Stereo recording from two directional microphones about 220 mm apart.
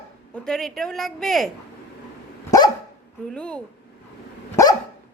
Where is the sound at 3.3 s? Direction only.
5° left (ahead or behind).